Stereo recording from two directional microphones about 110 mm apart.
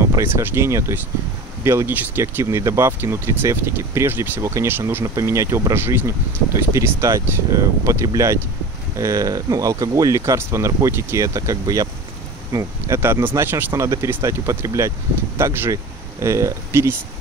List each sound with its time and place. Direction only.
0.0 s speech: 25° right (ahead or behind)